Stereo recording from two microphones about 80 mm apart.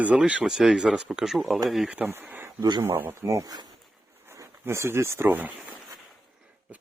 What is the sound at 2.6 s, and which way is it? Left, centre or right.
Speech, right.